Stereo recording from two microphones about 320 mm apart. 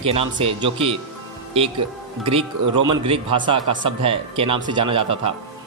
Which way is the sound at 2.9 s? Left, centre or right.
Centre.